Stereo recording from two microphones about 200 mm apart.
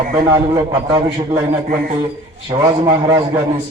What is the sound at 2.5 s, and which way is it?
Speech, 20° right (ahead or behind).